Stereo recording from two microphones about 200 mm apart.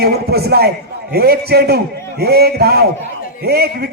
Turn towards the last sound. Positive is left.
turn(degrees=-55)  # may be behind; listen again after turning